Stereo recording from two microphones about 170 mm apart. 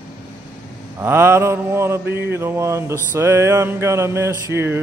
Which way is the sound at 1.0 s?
15° right (ahead or behind).